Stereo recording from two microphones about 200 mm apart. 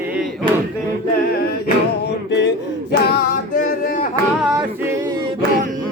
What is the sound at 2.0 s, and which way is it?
Music, 60° left (ahead or behind).